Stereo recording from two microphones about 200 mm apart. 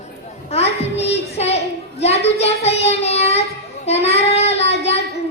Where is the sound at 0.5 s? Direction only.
30° left (ahead or behind).